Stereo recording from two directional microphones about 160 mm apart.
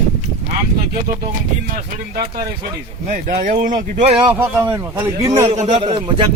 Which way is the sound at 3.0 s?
50° right (ahead or behind).